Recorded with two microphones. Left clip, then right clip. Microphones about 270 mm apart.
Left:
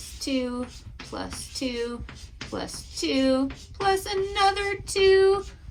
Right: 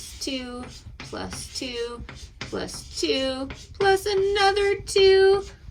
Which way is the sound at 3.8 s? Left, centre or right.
Centre.